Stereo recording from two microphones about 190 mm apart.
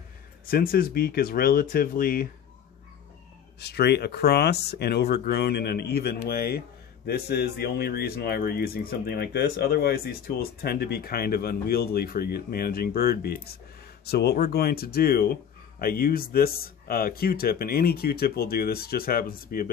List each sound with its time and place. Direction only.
0.5 s speech: 50° left (ahead or behind)
3.5 s speech: 60° left (ahead or behind)